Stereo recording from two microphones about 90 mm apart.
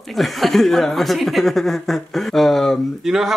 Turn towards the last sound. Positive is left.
turn(degrees=-5)  # may be behind; listen again after turning